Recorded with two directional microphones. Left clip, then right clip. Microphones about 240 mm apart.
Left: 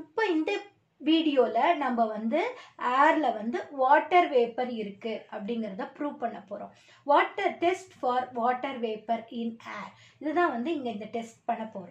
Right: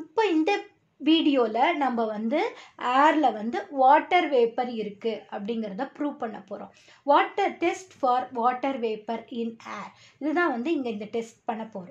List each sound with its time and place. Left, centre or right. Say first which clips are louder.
0.1 s a sound: right 4 dB; right
1.0 s a woman's voice: right 2 dB; right
10.2 s a woman's voice: right 2 dB; right